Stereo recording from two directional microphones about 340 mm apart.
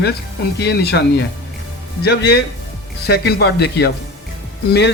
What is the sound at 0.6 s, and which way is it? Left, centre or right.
A man's voice, left.